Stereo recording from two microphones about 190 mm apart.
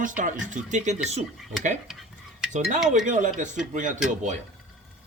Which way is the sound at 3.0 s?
40° right (ahead or behind).